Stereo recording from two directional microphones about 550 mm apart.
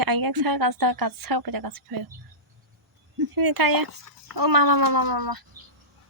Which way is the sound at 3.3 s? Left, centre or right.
Right.